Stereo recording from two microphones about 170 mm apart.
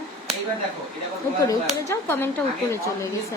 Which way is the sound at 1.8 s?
15° left (ahead or behind).